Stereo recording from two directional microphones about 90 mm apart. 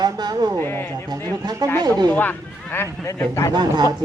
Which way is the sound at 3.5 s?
55° right (ahead or behind).